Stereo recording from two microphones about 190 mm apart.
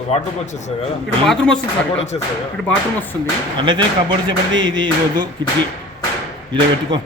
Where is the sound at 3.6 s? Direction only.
25° right (ahead or behind).